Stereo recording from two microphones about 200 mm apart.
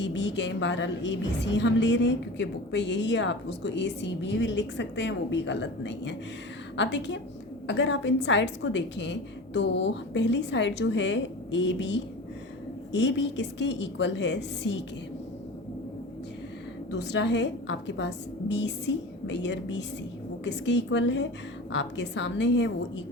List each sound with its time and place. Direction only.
0.0 s a woman's voice: 60° left (ahead or behind)
16.9 s a woman's voice: 60° left (ahead or behind)